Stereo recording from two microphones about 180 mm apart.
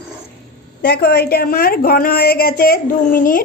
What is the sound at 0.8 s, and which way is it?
A woman's voice, 60° left (ahead or behind).